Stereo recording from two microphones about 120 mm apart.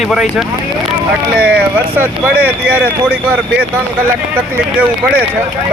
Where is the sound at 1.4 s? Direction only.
15° right (ahead or behind).